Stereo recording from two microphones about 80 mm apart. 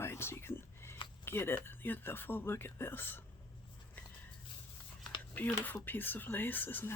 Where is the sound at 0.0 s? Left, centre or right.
Left.